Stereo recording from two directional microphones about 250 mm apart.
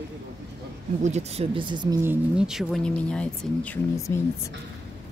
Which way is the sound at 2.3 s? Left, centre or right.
Centre.